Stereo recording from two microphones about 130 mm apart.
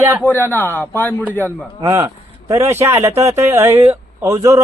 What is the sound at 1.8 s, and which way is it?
A man's voice, 25° right (ahead or behind).